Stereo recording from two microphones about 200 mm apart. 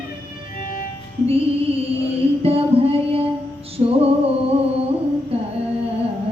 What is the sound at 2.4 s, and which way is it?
Music, 30° right (ahead or behind).